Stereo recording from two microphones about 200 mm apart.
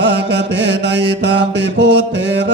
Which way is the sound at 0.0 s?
60° right (ahead or behind).